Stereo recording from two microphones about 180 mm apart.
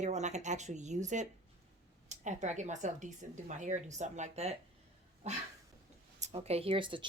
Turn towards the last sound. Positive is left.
turn(degrees=-25)  # may be behind; listen again after turning